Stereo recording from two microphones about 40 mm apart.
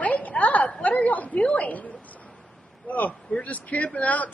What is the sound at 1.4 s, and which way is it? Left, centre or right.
Speech, left.